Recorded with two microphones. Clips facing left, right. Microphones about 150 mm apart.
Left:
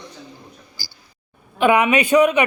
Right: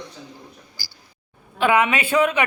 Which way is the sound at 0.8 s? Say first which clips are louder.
Left 3 dB; 25° left (ahead or behind).